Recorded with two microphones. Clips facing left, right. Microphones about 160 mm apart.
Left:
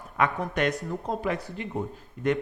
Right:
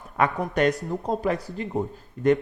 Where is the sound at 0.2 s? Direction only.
35° right (ahead or behind).